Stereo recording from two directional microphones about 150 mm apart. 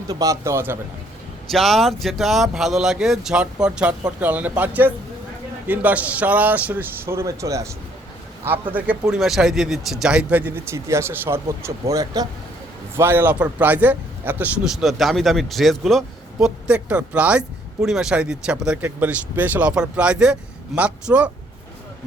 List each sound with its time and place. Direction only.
0.1 s a man's voice: 25° right (ahead or behind)
1.5 s a man's voice: centre (ahead or behind); by 7.7 s 20° right (ahead or behind)
8.4 s speech: 10° right (ahead or behind)
13.0 s a man's voice: 15° right (ahead or behind)